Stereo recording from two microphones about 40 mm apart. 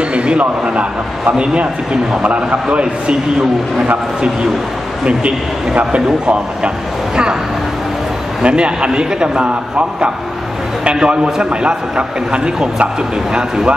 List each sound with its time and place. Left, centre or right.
0.1 s a man's voice: right
2.2 s a man's voice: right
5.9 s a man's voice: right
8.4 s a man's voice: right
12.3 s a man's voice: right